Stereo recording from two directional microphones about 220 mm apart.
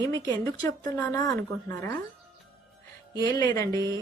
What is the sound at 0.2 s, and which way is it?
A woman's voice, 15° left (ahead or behind).